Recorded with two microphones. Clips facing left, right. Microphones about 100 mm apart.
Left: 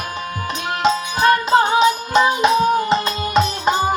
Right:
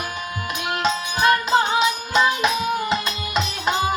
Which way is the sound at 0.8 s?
25° left (ahead or behind).